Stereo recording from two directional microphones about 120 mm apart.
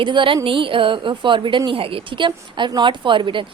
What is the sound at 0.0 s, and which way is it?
A woman's voice, 45° right (ahead or behind).